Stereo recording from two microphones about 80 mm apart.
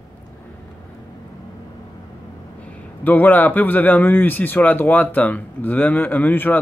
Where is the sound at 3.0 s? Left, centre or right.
Left.